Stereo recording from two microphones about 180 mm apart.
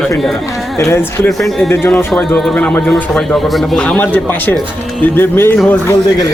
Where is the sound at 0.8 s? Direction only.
15° left (ahead or behind).